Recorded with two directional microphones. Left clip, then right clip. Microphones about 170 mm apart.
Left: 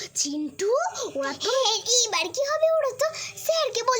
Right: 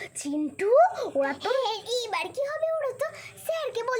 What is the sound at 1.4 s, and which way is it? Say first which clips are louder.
A child's voice: left 4 dB; 70° left (ahead or behind).